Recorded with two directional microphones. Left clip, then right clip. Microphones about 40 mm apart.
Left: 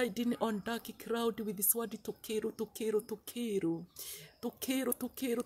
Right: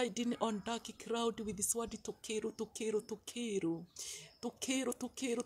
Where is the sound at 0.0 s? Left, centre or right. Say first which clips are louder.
Left 2 dB; left.